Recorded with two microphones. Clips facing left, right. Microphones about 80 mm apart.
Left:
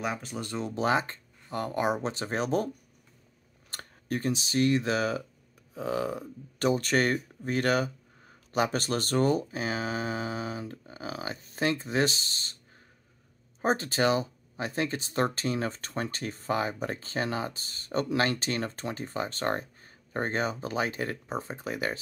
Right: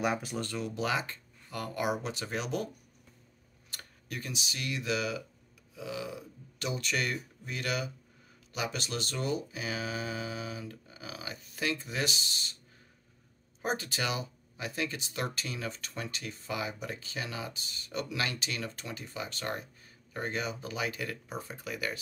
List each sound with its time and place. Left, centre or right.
0.0 s speech: centre
0.4 s speech: left
3.7 s speech: left
13.6 s speech: left